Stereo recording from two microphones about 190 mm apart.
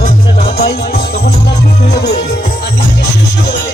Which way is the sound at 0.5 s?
55° left (ahead or behind).